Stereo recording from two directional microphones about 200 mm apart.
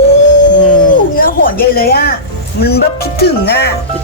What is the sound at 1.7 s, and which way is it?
Speech, 50° left (ahead or behind).